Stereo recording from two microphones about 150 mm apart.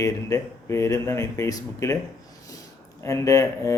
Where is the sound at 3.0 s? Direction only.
20° left (ahead or behind).